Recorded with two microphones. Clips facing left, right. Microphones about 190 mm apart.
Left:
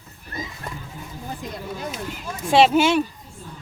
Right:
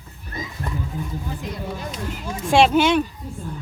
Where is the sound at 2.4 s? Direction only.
Centre (ahead or behind).